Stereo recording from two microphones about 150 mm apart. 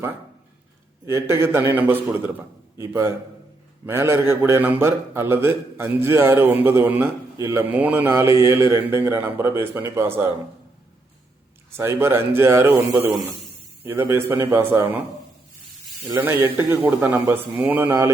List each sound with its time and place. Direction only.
1.0 s a man's voice: 20° right (ahead or behind)
11.8 s a man's voice: 15° right (ahead or behind)
16.0 s a man's voice: 15° right (ahead or behind)